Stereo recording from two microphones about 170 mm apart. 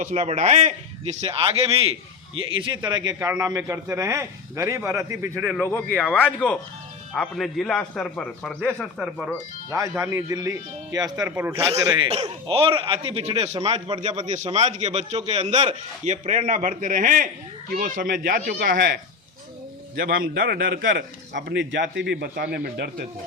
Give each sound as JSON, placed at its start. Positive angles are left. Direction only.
{"t": 0.2, "sound": "a man's voice", "side_deg": -40}
{"t": 5.6, "sound": "a man's voice", "side_deg": 10}
{"t": 9.0, "sound": "a man's voice", "side_deg": -5}
{"t": 9.6, "sound": "a man's voice", "side_deg": -20}
{"t": 12.2, "sound": "speech", "side_deg": -30}
{"t": 14.3, "sound": "a man's voice", "side_deg": -40}
{"t": 20.0, "sound": "a man's voice", "side_deg": -55}
{"t": 22.5, "sound": "speech", "side_deg": -65}